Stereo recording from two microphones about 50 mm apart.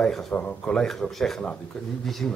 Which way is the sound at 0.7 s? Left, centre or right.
Centre.